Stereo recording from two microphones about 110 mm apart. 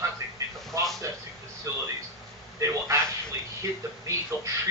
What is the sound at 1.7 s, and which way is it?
A man's voice, 30° right (ahead or behind).